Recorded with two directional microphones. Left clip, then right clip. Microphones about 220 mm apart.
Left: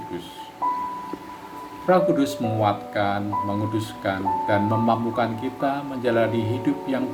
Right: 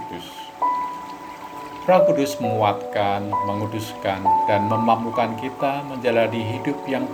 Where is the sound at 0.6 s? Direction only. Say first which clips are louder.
Right 3 dB; 40° right (ahead or behind).